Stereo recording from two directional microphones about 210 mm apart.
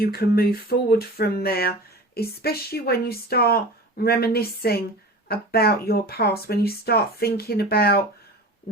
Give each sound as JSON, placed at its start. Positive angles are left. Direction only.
{"t": 0.0, "sound": "speech", "side_deg": 45}